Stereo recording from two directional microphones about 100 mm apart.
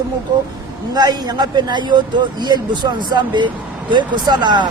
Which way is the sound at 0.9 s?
40° right (ahead or behind).